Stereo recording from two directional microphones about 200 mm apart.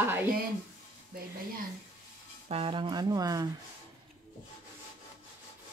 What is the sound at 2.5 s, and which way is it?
Speech, 25° right (ahead or behind).